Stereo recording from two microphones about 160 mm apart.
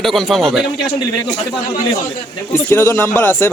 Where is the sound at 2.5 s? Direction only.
15° left (ahead or behind).